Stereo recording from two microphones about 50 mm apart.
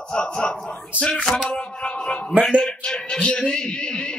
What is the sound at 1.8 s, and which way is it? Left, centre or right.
Speech, left.